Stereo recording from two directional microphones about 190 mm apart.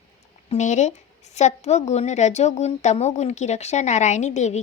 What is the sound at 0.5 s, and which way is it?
A woman's voice, 40° left (ahead or behind).